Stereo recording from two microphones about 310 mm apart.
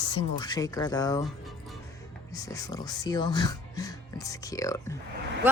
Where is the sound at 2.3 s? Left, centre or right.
Centre.